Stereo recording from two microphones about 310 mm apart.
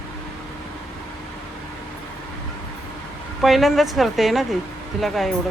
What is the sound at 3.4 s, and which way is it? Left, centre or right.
Speech, centre.